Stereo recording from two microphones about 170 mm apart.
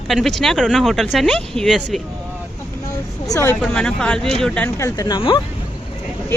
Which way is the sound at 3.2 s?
20° left (ahead or behind).